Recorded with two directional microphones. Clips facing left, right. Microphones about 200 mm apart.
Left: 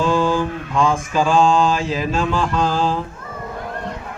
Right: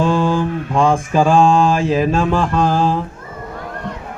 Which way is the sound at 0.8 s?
55° right (ahead or behind).